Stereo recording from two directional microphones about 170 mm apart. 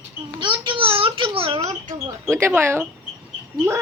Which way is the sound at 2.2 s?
15° right (ahead or behind).